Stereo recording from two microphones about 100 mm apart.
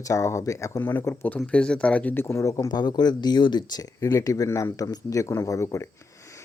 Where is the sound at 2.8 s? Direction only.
45° left (ahead or behind).